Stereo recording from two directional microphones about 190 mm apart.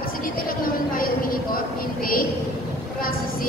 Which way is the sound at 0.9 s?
50° left (ahead or behind).